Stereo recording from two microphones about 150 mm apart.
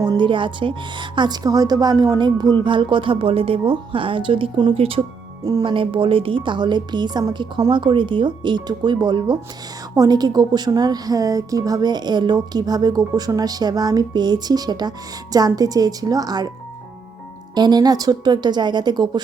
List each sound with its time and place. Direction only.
0.0 s speech: 30° right (ahead or behind)
5.4 s a woman's voice: 25° right (ahead or behind)
17.5 s a woman's voice: 30° right (ahead or behind)